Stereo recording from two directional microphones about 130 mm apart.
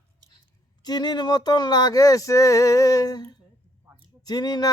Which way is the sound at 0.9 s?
30° left (ahead or behind).